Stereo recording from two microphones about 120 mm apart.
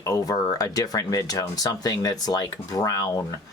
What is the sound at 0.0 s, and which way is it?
Speech, 30° left (ahead or behind).